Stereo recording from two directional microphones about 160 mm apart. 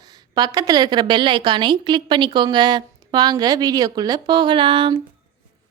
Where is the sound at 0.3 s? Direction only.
25° right (ahead or behind).